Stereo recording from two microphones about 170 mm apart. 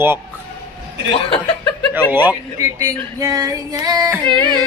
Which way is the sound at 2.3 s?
20° right (ahead or behind).